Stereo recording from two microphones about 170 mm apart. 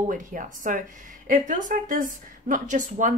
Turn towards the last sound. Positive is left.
turn(degrees=-50)  # may be behind; listen again after turning